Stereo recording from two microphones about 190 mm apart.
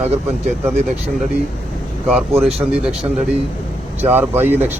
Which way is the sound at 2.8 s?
5° right (ahead or behind).